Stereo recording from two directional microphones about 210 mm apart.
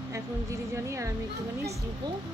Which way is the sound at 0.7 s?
15° right (ahead or behind).